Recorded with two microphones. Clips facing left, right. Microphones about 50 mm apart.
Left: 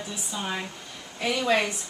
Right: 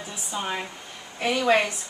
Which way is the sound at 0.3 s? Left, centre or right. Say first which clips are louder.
Right 3 dB; centre.